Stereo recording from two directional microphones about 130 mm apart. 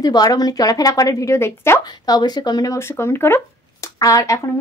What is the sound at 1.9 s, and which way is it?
Speech, 30° left (ahead or behind).